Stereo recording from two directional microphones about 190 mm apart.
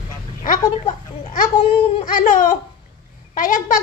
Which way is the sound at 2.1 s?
45° left (ahead or behind).